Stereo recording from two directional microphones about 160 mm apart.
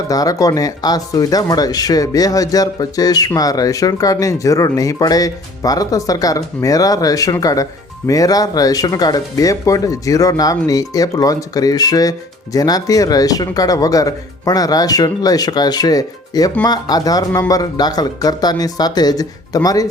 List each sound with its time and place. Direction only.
0.1 s speech: 20° left (ahead or behind)